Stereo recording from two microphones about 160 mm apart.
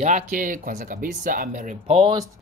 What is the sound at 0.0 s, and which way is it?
Speech, 55° right (ahead or behind).